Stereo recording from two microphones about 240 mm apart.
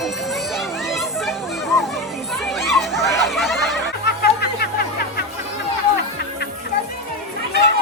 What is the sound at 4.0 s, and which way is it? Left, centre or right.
Music, left.